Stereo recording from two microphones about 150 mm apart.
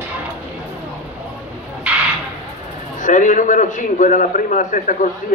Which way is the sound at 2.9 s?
55° left (ahead or behind).